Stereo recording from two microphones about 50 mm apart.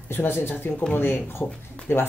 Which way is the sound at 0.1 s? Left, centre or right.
Left.